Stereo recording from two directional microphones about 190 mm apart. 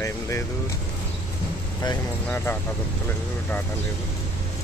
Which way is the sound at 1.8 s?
15° left (ahead or behind).